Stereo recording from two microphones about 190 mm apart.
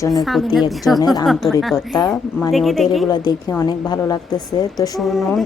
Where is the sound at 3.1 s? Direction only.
20° left (ahead or behind).